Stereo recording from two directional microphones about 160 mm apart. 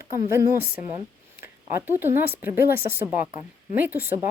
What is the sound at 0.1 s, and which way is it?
Speech, 15° right (ahead or behind).